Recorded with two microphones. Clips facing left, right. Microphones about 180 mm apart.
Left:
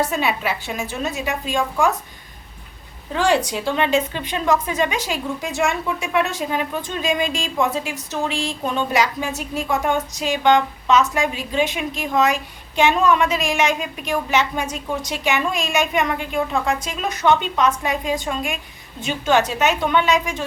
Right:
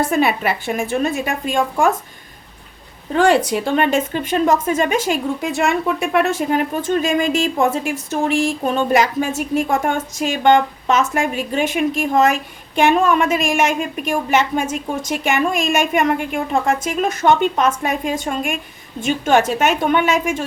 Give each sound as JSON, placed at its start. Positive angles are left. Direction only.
{"t": 0.0, "sound": "a woman's voice", "side_deg": -55}
{"t": 3.2, "sound": "a woman's voice", "side_deg": -55}